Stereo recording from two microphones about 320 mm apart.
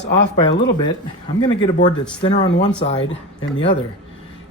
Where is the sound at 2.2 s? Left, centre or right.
Centre.